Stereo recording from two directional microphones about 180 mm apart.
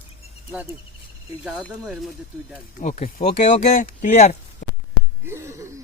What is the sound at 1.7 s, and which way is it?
Speech, 5° right (ahead or behind).